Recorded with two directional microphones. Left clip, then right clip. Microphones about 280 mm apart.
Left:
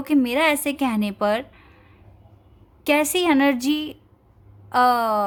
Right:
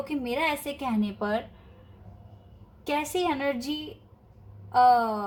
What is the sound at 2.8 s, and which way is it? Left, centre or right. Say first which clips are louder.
A woman's voice: left 8 dB; left.